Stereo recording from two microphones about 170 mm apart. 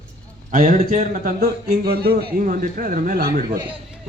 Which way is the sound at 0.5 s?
50° right (ahead or behind).